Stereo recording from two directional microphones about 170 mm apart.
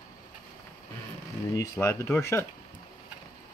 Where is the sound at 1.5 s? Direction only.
15° left (ahead or behind).